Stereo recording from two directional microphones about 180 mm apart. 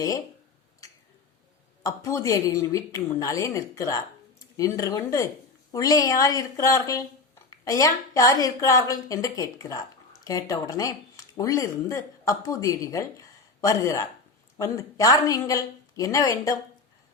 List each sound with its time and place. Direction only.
1.8 s speech: 15° left (ahead or behind)